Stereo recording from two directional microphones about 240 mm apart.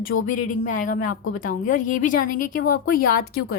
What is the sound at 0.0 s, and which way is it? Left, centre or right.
A woman's voice, left.